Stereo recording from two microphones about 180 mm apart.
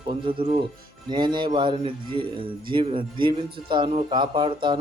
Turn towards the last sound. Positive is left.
turn(degrees=-25)  # may be behind; listen again after turning